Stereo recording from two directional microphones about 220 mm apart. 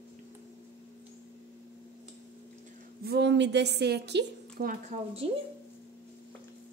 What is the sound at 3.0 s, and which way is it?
A woman's voice, 50° right (ahead or behind).